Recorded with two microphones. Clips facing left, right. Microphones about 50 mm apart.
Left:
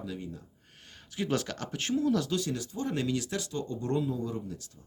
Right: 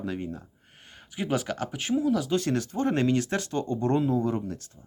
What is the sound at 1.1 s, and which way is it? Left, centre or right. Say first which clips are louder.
Speech: right 3 dB; centre.